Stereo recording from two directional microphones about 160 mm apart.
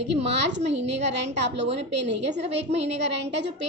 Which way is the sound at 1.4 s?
90° right.